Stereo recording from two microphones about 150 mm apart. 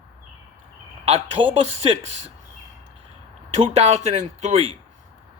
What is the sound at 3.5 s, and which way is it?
Speech, 45° right (ahead or behind).